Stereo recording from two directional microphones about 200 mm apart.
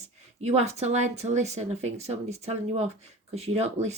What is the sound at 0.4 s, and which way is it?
Speech, 30° right (ahead or behind).